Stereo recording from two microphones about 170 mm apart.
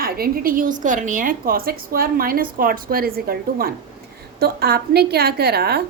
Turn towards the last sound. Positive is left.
turn(degrees=-70)  # may be behind; listen again after turning